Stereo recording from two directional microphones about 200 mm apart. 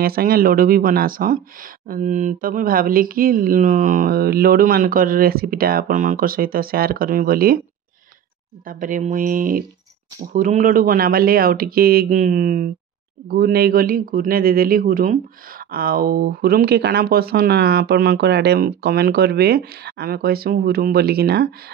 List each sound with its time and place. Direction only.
0.0 s speech: 50° right (ahead or behind)
8.6 s speech: 40° right (ahead or behind)